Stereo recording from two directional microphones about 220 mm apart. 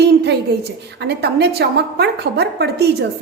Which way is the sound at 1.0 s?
50° right (ahead or behind).